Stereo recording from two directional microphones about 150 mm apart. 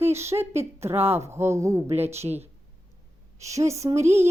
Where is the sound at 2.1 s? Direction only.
45° right (ahead or behind).